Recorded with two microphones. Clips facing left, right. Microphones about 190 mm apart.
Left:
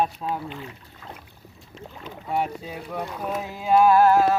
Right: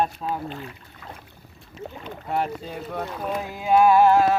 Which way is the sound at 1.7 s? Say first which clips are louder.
Right 4 dB; centre (ahead or behind).